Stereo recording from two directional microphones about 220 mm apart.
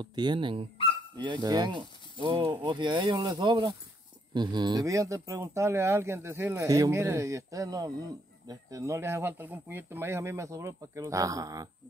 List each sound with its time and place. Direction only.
0.0 s speech: 20° right (ahead or behind)